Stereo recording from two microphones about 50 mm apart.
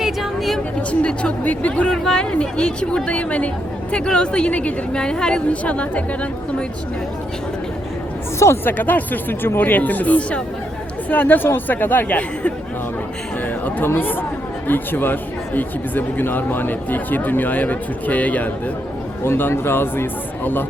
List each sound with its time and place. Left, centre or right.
0.0 s a sound: centre
0.8 s a woman's voice: left
1.9 s a woman's voice: centre
8.6 s speech: left
11.1 s speech: left
13.7 s speech: left
19.2 s speech: left